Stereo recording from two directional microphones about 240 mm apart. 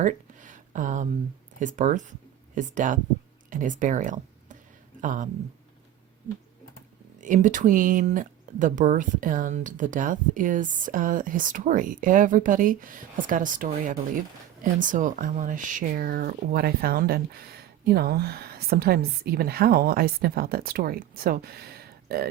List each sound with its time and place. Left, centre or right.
0.0 s a sound: right
1.5 s speech: right
7.2 s speech: right